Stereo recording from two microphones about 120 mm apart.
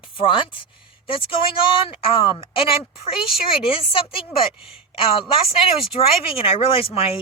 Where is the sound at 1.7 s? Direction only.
50° left (ahead or behind).